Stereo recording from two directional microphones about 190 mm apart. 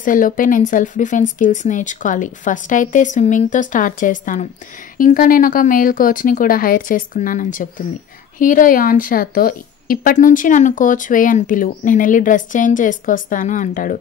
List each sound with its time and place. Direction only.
0.0 s a woman's voice: 45° left (ahead or behind)